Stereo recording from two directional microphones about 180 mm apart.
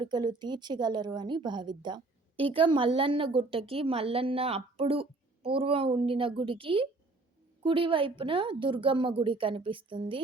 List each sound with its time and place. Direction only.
0.0 s a woman's voice: 25° right (ahead or behind)